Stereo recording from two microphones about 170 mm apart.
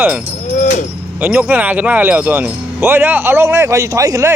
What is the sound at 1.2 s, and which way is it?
Speech, 10° right (ahead or behind).